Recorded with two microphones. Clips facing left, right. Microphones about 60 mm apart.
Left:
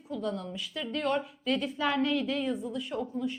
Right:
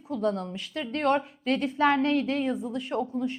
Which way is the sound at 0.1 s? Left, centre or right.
Right.